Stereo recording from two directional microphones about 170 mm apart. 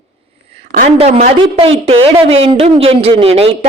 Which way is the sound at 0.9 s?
40° right (ahead or behind).